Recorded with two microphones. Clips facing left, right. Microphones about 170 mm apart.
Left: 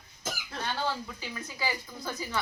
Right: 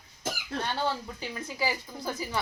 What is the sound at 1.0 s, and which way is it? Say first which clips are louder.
Speech: right 3 dB; 30° right (ahead or behind).